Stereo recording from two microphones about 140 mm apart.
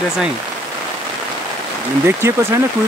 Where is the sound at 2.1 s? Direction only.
20° right (ahead or behind).